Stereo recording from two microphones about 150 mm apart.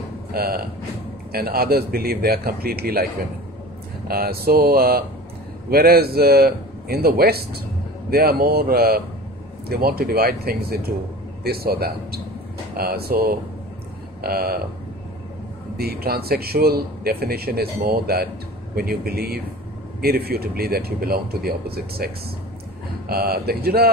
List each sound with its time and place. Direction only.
0.3 s a man's voice: 90° right
4.1 s a man's voice: 90° right
15.8 s a man's voice: 90° right